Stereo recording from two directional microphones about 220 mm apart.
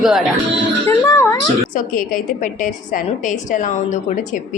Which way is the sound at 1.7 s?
40° left (ahead or behind).